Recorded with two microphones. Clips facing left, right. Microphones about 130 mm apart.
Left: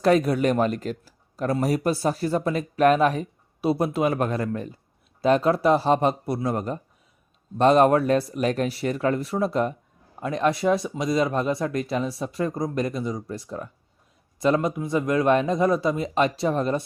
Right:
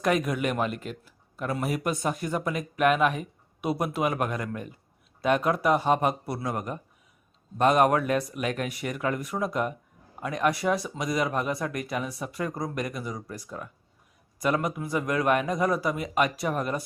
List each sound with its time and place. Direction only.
0.0 s speech: 30° left (ahead or behind)